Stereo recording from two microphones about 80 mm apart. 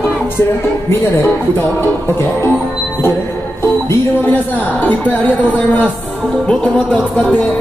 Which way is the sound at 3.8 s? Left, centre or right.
Left.